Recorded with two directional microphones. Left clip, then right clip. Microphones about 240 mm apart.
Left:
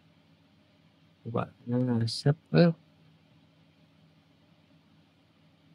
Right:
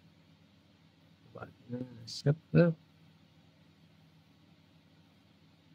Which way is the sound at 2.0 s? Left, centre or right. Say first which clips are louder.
Left 4 dB; centre.